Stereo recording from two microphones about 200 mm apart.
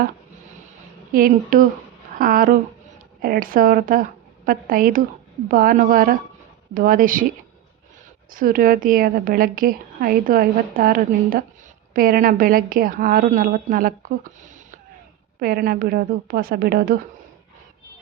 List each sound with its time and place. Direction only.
1.1 s speech: 45° right (ahead or behind)
15.4 s speech: 50° right (ahead or behind)